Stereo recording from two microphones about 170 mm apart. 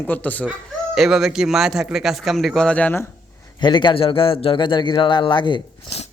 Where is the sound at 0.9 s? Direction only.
Centre (ahead or behind).